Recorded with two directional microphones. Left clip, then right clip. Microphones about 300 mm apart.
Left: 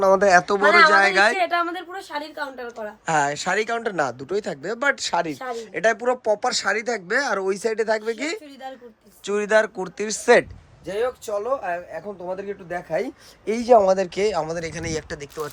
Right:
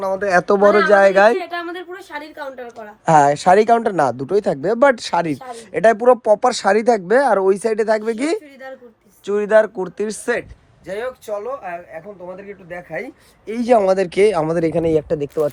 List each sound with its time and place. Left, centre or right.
0.0 s speech: left
0.3 s speech: centre
1.4 s a woman's voice: left; by 2.9 s centre
3.1 s speech: centre
9.2 s a woman's voice: centre
13.7 s speech: right; by 15.4 s centre